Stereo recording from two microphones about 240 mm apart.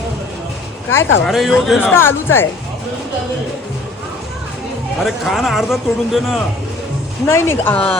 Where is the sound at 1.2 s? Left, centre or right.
Centre.